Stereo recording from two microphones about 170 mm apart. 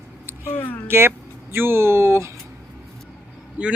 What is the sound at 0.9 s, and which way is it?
Speech, 15° right (ahead or behind).